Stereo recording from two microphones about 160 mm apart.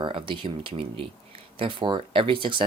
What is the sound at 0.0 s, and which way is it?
Speech, 30° right (ahead or behind).